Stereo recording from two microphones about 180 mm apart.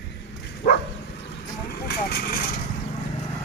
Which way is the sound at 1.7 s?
60° left (ahead or behind).